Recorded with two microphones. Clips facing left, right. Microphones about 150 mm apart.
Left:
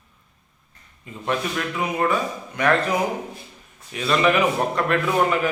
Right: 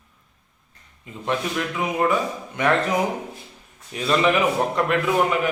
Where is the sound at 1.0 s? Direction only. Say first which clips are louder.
Even; 20° right (ahead or behind).